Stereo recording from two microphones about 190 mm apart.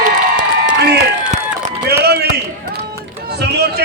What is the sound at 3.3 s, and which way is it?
Speech, 60° right (ahead or behind).